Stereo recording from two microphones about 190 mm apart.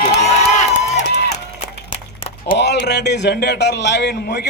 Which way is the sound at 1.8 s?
45° left (ahead or behind).